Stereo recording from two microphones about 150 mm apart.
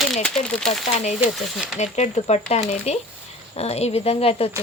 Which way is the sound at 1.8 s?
45° left (ahead or behind).